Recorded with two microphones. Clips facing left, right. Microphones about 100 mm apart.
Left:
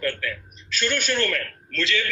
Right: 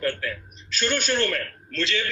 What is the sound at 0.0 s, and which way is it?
A man's voice, 35° right (ahead or behind).